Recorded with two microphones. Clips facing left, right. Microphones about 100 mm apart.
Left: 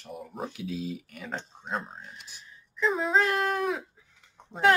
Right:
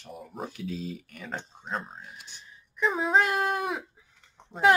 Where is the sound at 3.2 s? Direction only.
20° right (ahead or behind).